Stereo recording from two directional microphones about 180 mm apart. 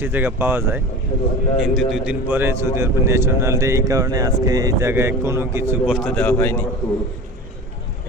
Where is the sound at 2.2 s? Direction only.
10° right (ahead or behind).